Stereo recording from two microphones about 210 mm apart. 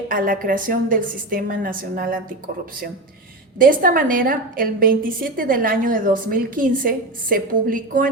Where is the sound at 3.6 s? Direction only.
40° right (ahead or behind).